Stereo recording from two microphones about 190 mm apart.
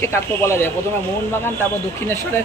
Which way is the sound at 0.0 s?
15° left (ahead or behind).